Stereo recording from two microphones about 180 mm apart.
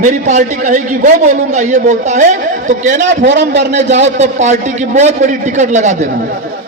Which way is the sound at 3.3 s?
75° right (ahead or behind).